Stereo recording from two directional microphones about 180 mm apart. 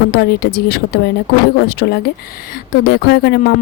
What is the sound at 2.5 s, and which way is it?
A woman's voice, 50° left (ahead or behind).